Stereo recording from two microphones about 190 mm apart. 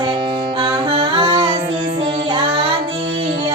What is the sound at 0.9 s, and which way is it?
Music, 30° right (ahead or behind).